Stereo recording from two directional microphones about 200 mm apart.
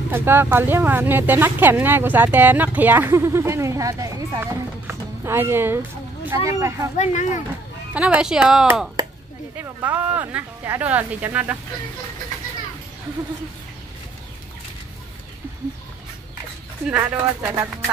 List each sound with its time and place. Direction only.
0.1 s speech: 10° right (ahead or behind)
7.0 s speech: 35° left (ahead or behind)
7.9 s speech: 5° right (ahead or behind)
16.8 s speech: 5° right (ahead or behind)